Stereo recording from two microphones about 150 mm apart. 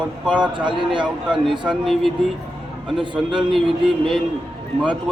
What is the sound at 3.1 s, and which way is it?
Speech, 35° right (ahead or behind).